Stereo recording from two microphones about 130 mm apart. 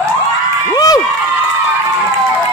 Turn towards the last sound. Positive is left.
turn(degrees=30)  # may be behind; listen again after turning